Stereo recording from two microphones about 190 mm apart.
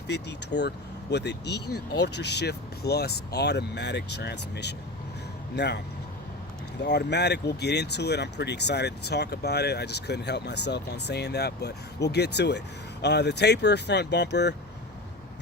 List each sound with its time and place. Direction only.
0.1 s speech: 65° left (ahead or behind)
6.8 s speech: 65° left (ahead or behind)